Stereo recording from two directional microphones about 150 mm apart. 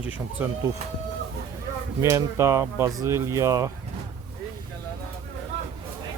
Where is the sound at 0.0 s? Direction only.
10° right (ahead or behind).